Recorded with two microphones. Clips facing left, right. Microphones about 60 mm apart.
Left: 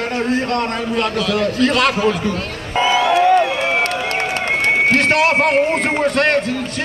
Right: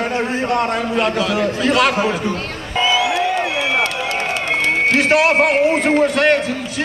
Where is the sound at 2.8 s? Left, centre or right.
Left.